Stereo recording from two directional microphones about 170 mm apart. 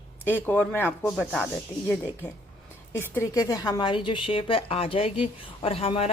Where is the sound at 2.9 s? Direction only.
15° left (ahead or behind); by 6.1 s 35° left (ahead or behind).